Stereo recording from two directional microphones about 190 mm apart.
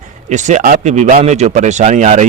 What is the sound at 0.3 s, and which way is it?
Speech, 40° right (ahead or behind).